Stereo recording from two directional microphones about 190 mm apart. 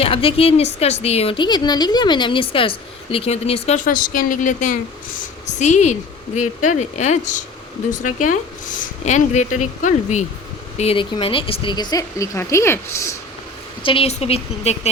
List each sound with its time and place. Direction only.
0.0 s a woman's voice: 30° left (ahead or behind); by 13.1 s 15° left (ahead or behind)
13.8 s a woman's voice: 30° left (ahead or behind)